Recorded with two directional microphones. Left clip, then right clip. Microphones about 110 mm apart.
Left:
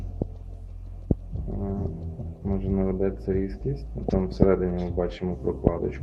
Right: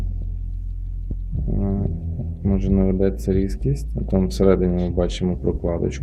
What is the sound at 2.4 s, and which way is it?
Speech, 25° right (ahead or behind).